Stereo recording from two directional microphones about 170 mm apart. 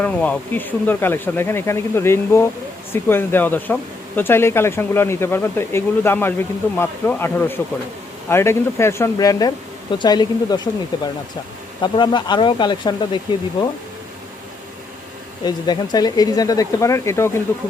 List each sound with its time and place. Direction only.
0.0 s speech: 10° left (ahead or behind); by 13.4 s 25° left (ahead or behind)
15.4 s speech: 25° left (ahead or behind)